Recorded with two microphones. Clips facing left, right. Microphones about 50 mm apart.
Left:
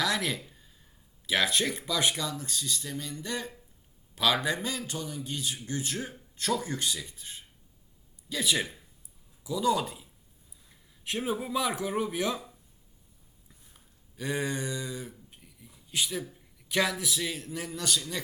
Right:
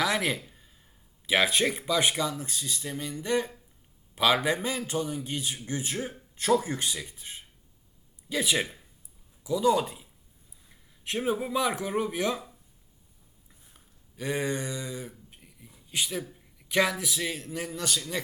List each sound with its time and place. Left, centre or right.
0.0 s speech: centre
0.4 s a sound: centre
1.3 s a man's voice: centre
9.4 s a man's voice: centre
13.5 s a sound: centre
16.3 s a man's voice: centre